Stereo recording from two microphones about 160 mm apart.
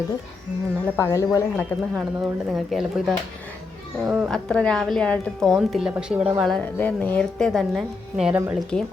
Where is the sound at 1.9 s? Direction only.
5° right (ahead or behind).